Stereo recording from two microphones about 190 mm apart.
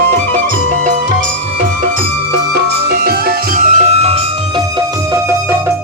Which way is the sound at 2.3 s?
55° right (ahead or behind).